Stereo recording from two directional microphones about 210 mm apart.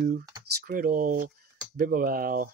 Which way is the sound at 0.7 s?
40° right (ahead or behind).